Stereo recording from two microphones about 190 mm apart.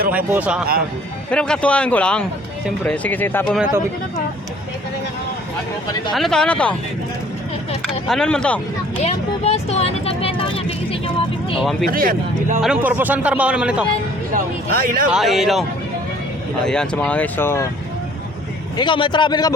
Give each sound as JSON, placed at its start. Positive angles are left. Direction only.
{"t": 0.3, "sound": "speech", "side_deg": -5}
{"t": 1.3, "sound": "a man's voice", "side_deg": 5}
{"t": 6.1, "sound": "a man's voice", "side_deg": 0}
{"t": 8.0, "sound": "a man's voice", "side_deg": 0}
{"t": 9.0, "sound": "vehicle", "side_deg": 35}
{"t": 11.6, "sound": "a man's voice", "side_deg": 0}
{"t": 11.9, "sound": "speech", "side_deg": -50}
{"t": 12.6, "sound": "speech", "side_deg": -5}
{"t": 14.3, "sound": "speech", "side_deg": -50}
{"t": 15.1, "sound": "a man's voice", "side_deg": 0}
{"t": 16.6, "sound": "speech", "side_deg": 5}
{"t": 18.8, "sound": "a man's voice", "side_deg": 25}